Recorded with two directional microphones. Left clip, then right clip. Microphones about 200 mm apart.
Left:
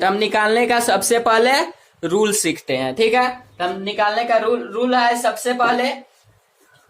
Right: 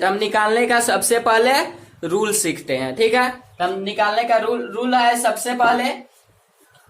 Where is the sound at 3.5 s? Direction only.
10° left (ahead or behind).